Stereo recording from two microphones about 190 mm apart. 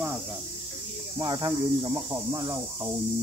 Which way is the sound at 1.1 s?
25° right (ahead or behind).